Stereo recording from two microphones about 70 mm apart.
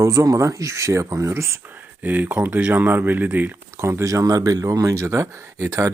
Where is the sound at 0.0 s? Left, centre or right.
Right.